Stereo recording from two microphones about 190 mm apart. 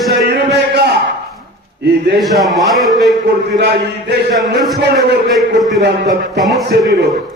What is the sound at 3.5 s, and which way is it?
Speech, 60° right (ahead or behind).